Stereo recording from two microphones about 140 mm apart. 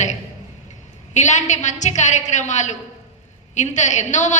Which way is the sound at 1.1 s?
55° left (ahead or behind).